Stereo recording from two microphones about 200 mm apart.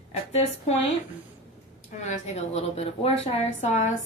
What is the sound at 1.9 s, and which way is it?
A woman's voice, 40° left (ahead or behind).